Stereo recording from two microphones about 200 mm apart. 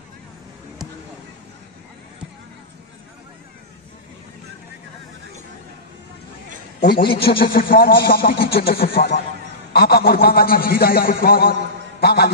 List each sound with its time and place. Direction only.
6.8 s a man's voice: 55° left (ahead or behind)